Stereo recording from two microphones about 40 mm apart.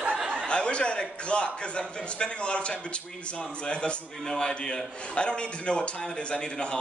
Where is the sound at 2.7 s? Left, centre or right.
Left.